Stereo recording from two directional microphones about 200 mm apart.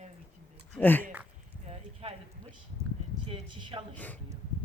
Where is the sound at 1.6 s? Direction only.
30° right (ahead or behind).